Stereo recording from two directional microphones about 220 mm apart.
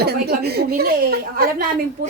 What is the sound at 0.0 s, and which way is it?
A woman's voice, 45° right (ahead or behind).